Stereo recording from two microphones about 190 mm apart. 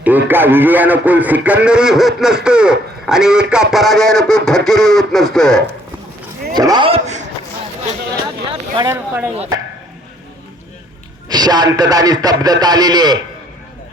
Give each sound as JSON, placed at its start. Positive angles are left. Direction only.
{"t": 0.0, "sound": "speech", "side_deg": -10}
{"t": 6.5, "sound": "a man's voice", "side_deg": -20}
{"t": 8.4, "sound": "speech", "side_deg": -25}
{"t": 8.9, "sound": "speech", "side_deg": -10}
{"t": 11.3, "sound": "speech", "side_deg": -20}